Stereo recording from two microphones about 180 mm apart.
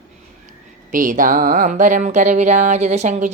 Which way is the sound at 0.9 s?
50° right (ahead or behind).